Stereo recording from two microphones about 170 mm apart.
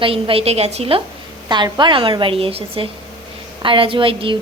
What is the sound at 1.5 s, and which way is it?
A woman's voice, 25° right (ahead or behind).